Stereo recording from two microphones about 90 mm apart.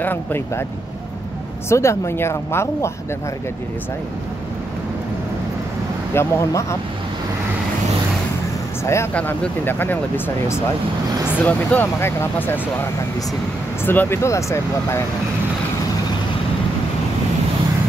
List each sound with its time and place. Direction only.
0.0 s speech: 20° left (ahead or behind)
1.7 s speech: 30° left (ahead or behind)
6.1 s speech: 30° left (ahead or behind)
8.8 s speech: 30° left (ahead or behind)
9.1 s speech: 20° left (ahead or behind)
13.8 s speech: 25° left (ahead or behind)